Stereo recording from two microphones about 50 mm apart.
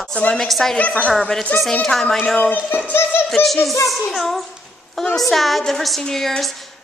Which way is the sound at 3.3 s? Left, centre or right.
Centre.